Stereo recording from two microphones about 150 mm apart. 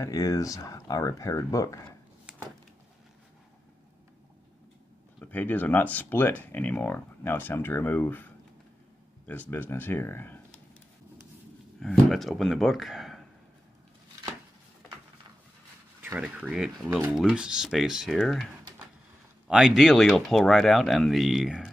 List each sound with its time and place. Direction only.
0.0 s speech: 25° left (ahead or behind)
5.2 s speech: 10° left (ahead or behind)
9.5 s speech: 15° left (ahead or behind)
11.8 s speech: centre (ahead or behind)
16.0 s speech: 10° right (ahead or behind)